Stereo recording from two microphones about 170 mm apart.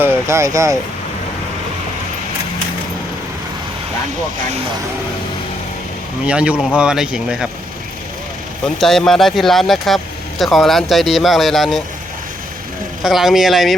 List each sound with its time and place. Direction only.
0.0 s speech: 15° right (ahead or behind)
6.2 s speech: 5° right (ahead or behind)
8.6 s speech: centre (ahead or behind)
13.0 s speech: centre (ahead or behind)